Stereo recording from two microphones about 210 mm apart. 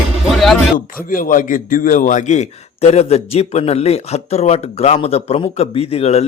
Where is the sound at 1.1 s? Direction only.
40° left (ahead or behind).